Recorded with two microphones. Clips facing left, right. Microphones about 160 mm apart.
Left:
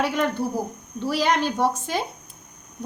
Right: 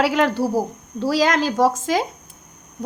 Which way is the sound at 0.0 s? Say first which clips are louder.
Right 5 dB; 90° right.